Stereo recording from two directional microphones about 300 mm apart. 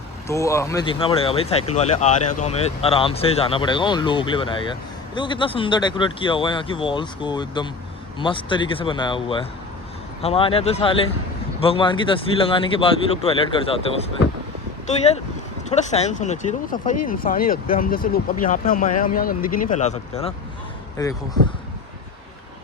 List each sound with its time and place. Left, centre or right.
0.3 s speech: centre